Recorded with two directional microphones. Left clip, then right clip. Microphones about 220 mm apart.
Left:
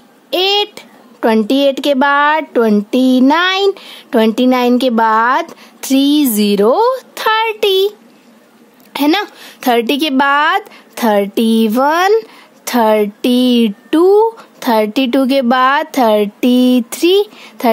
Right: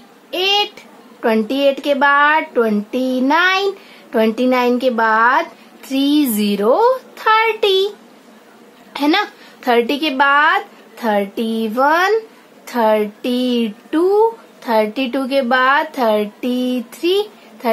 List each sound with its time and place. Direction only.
0.3 s a child's voice: 50° left (ahead or behind)
8.9 s a child's voice: 45° left (ahead or behind)